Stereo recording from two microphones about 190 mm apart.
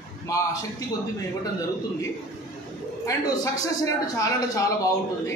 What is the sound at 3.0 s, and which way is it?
A woman's voice, 20° left (ahead or behind).